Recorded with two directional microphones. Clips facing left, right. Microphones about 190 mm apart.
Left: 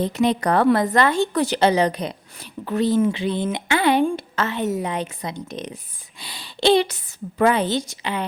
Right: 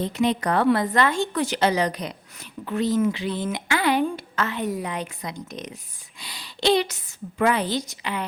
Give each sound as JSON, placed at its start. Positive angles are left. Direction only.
{"t": 0.0, "sound": "a woman's voice", "side_deg": 40}